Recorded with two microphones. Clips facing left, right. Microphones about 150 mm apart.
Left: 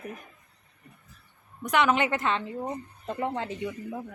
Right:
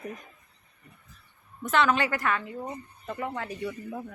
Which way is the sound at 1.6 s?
15° left (ahead or behind).